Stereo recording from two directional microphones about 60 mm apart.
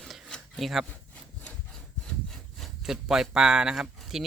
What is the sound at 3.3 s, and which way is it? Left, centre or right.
Speech, centre.